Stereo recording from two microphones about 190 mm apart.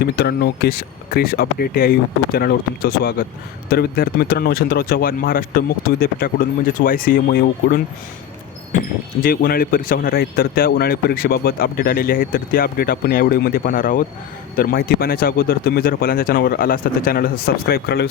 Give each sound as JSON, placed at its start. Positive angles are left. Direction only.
{"t": 0.0, "sound": "speech", "side_deg": 55}